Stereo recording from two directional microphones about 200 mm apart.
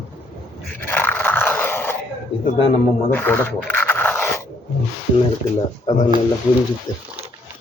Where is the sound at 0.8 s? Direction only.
10° left (ahead or behind).